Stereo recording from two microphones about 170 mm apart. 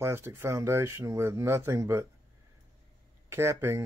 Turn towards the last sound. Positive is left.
turn(degrees=-15)  # may be behind; listen again after turning